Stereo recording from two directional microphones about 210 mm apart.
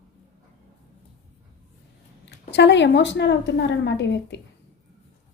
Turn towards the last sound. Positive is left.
turn(degrees=55)  # may be behind; listen again after turning